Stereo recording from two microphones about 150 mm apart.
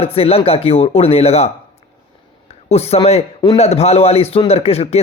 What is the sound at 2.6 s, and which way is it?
A man's voice, 45° left (ahead or behind).